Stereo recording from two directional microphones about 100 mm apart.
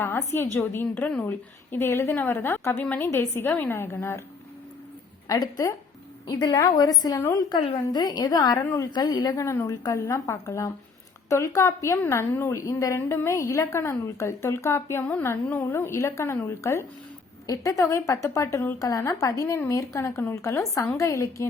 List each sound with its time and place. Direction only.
0.0 s a woman's voice: 25° left (ahead or behind)
5.3 s a woman's voice: 35° left (ahead or behind)
9.3 s a woman's voice: 30° left (ahead or behind)